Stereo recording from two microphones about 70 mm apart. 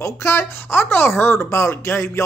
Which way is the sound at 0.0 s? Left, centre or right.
Left.